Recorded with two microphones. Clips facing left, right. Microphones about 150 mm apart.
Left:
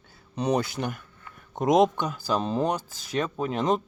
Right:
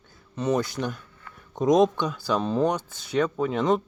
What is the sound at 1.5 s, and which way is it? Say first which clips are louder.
Speech: right 1 dB; 60° left (ahead or behind).